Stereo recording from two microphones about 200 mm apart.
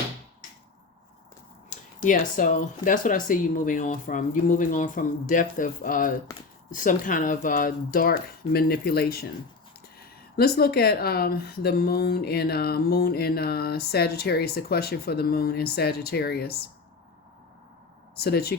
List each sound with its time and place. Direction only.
1.7 s speech: 40° left (ahead or behind)
18.2 s speech: 50° left (ahead or behind)